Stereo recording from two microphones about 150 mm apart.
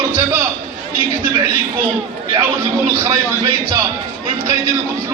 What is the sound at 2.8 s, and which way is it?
Speech, 20° right (ahead or behind).